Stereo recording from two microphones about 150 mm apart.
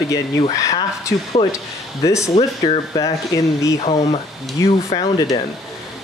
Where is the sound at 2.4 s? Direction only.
35° left (ahead or behind).